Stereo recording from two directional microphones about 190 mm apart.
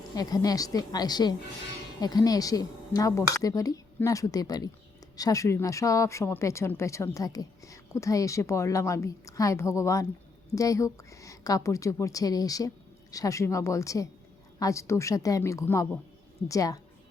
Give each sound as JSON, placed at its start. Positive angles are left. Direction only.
{"t": 0.1, "sound": "a woman's voice", "side_deg": 20}